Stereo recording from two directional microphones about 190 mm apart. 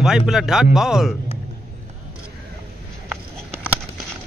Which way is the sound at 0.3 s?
Centre (ahead or behind).